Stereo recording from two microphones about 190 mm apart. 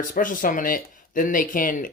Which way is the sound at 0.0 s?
45° left (ahead or behind).